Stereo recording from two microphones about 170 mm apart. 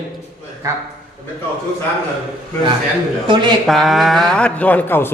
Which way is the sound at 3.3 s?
30° right (ahead or behind).